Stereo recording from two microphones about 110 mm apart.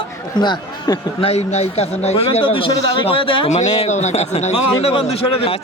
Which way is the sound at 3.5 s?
90° left.